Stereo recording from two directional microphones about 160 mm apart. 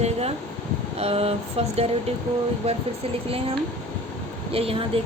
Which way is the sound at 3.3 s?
35° right (ahead or behind).